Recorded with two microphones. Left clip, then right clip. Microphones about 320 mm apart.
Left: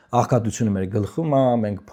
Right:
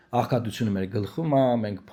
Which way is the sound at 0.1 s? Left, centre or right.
Left.